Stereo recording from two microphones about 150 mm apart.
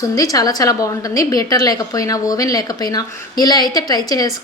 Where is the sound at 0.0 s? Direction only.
25° left (ahead or behind).